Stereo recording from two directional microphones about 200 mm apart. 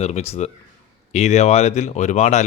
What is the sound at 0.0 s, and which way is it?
A man's voice, 30° left (ahead or behind).